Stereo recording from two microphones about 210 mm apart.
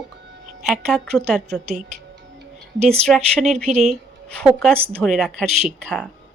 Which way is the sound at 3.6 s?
30° right (ahead or behind).